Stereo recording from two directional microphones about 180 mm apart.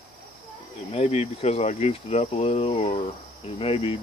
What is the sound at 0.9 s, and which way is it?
Speech, 35° left (ahead or behind).